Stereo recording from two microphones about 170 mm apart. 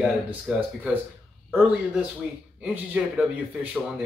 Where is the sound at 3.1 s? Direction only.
5° right (ahead or behind).